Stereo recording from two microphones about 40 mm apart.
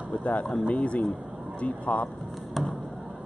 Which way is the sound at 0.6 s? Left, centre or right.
Left.